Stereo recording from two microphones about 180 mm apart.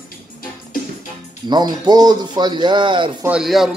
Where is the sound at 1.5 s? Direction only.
20° right (ahead or behind).